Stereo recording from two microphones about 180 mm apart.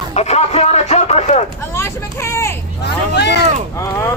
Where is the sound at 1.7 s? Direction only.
15° left (ahead or behind).